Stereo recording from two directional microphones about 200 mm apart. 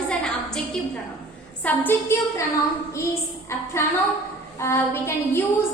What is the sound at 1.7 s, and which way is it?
Speech, 10° left (ahead or behind).